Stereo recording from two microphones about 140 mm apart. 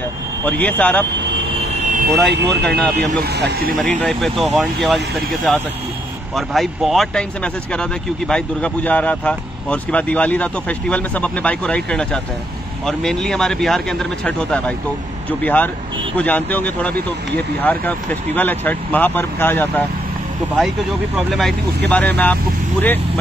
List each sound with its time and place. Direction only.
0.5 s speech: 10° left (ahead or behind)
2.1 s speech: 5° left (ahead or behind)
3.1 s speech: 90° right
4.0 s speech: centre (ahead or behind)
21.3 s speech: centre (ahead or behind)